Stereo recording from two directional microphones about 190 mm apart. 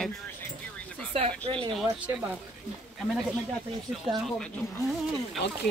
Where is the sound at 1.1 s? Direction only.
30° right (ahead or behind).